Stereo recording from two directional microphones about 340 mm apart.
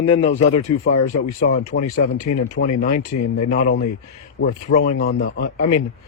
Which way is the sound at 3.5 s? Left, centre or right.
Left.